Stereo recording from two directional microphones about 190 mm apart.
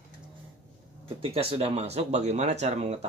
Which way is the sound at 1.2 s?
30° right (ahead or behind).